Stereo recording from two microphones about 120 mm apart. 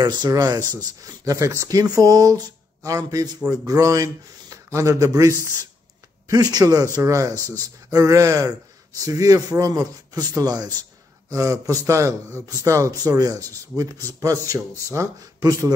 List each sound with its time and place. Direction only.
0.0 s a man's voice: 35° right (ahead or behind)